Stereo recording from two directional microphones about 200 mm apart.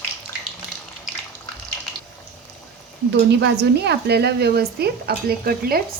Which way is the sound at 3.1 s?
60° right (ahead or behind).